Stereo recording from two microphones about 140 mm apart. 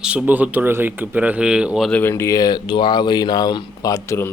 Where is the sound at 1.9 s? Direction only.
15° left (ahead or behind).